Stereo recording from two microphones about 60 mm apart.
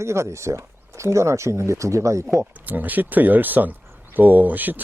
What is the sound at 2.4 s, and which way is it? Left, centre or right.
Speech, right.